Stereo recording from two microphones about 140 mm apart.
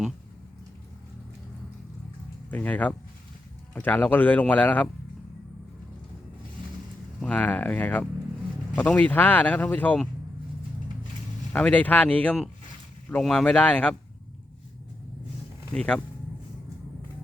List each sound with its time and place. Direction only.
2.5 s speech: 10° left (ahead or behind)
7.2 s speech: 10° left (ahead or behind)
11.5 s speech: 10° left (ahead or behind)
15.7 s speech: 5° left (ahead or behind)